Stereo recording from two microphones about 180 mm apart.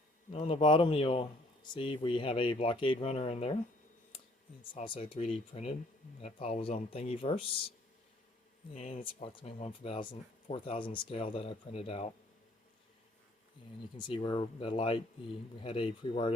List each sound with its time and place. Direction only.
0.3 s speech: 35° left (ahead or behind)
4.7 s speech: 30° left (ahead or behind)
8.7 s speech: 35° left (ahead or behind)
13.9 s speech: 25° left (ahead or behind)